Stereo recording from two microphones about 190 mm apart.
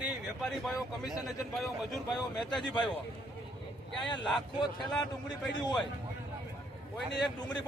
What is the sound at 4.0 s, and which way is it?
Speech, 25° left (ahead or behind).